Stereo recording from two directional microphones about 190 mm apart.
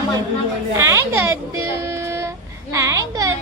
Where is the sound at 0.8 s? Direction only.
15° right (ahead or behind).